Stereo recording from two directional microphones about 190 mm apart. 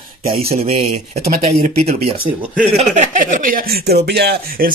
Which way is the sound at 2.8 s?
40° right (ahead or behind).